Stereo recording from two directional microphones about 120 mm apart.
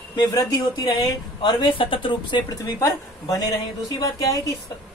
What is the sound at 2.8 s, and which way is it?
A woman's voice, 30° left (ahead or behind).